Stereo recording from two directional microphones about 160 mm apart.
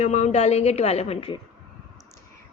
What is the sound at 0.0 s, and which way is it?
A woman's voice, 45° left (ahead or behind).